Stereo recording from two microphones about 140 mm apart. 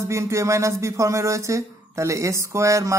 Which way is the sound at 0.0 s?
20° right (ahead or behind).